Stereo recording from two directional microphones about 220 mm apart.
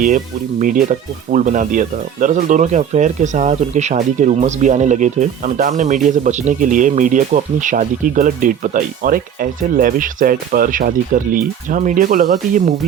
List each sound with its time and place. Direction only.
0.6 s speech: 35° right (ahead or behind)